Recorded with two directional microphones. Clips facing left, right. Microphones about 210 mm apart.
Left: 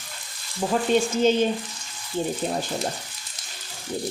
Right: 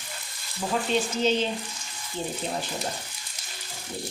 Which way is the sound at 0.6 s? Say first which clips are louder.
Left 4 dB; 25° left (ahead or behind).